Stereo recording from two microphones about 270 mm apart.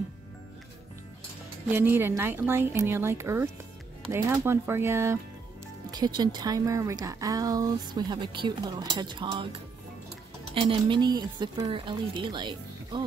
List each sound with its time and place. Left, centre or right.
1.7 s a woman's voice: centre